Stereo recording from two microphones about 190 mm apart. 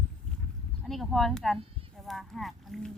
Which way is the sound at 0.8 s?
Centre (ahead or behind).